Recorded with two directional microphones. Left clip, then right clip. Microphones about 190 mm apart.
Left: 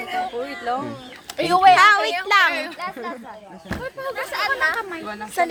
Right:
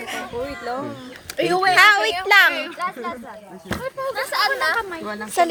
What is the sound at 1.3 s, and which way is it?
Speech, 45° left (ahead or behind).